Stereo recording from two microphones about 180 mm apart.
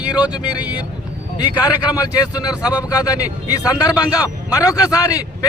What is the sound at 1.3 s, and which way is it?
A man's voice, 20° left (ahead or behind).